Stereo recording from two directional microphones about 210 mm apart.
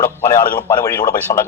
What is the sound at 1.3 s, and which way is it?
Speech, 25° left (ahead or behind).